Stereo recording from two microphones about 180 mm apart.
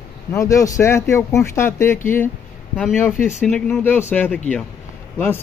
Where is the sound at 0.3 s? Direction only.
15° left (ahead or behind).